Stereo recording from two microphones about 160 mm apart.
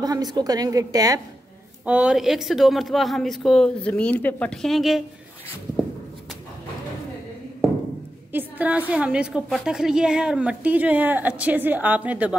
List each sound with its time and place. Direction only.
0.0 s a woman's voice: 25° right (ahead or behind)
1.9 s a woman's voice: 5° right (ahead or behind)
8.3 s a woman's voice: 10° right (ahead or behind)